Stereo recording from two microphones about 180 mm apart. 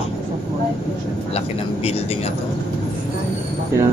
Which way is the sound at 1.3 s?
35° left (ahead or behind).